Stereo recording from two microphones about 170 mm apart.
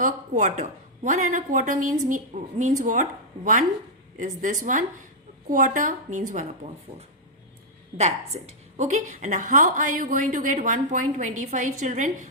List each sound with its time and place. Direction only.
0.0 s a woman's voice: 45° right (ahead or behind)
7.9 s a woman's voice: 40° right (ahead or behind)